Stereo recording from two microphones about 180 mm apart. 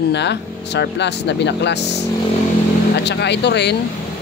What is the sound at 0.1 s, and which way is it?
Speech, 70° left (ahead or behind).